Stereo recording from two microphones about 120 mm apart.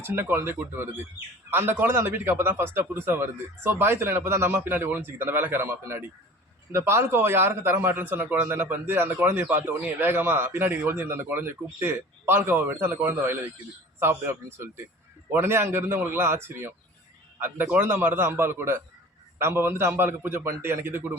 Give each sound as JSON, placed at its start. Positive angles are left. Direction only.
{"t": 0.0, "sound": "a man's voice", "side_deg": -20}